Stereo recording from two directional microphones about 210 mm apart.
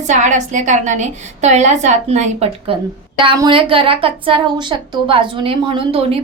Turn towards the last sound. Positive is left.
turn(degrees=-25)  # may be behind; listen again after turning